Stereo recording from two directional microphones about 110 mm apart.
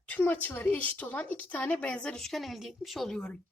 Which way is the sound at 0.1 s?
15° left (ahead or behind).